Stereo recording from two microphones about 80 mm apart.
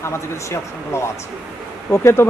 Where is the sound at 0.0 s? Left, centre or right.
Left.